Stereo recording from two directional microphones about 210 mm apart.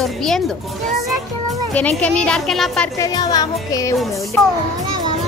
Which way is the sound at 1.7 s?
5° left (ahead or behind).